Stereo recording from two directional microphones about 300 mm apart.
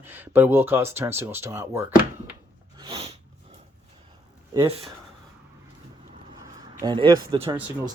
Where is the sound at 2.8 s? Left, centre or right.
Centre.